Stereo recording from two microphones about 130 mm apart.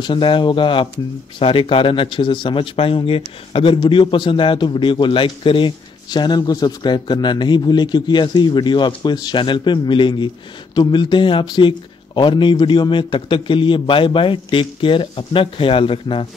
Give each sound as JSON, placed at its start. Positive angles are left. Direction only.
{"t": 0.0, "sound": "a man's voice", "side_deg": 40}